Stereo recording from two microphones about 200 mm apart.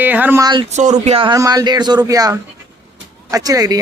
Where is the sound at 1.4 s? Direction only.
20° right (ahead or behind).